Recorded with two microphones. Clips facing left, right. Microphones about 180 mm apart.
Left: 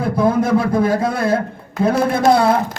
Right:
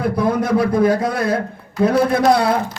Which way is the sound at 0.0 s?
25° left (ahead or behind).